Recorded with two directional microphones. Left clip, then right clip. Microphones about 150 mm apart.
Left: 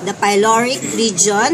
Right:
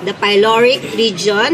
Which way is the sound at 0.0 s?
20° left (ahead or behind).